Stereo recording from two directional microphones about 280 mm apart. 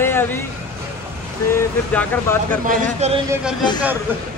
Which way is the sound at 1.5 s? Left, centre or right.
Centre.